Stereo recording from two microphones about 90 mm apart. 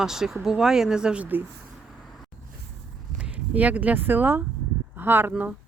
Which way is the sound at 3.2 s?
15° right (ahead or behind).